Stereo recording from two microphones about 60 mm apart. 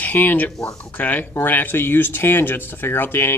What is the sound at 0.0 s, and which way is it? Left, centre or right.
Speech, left.